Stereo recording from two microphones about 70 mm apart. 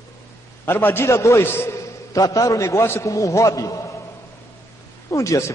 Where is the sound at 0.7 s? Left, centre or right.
Left.